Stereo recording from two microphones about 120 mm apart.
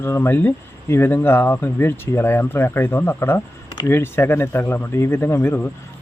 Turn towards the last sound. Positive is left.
turn(degrees=15)  # may be behind; listen again after turning